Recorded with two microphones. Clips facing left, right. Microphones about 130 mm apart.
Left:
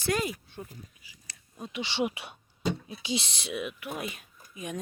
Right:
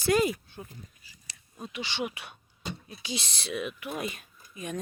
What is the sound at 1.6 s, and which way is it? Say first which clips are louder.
Speech: left 3 dB; 20° left (ahead or behind).